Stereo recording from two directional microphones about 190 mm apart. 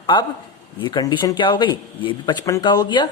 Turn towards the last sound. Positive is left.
turn(degrees=20)  # may be behind; listen again after turning